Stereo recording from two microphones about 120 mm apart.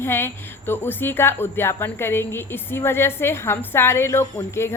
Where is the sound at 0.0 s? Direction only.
20° left (ahead or behind).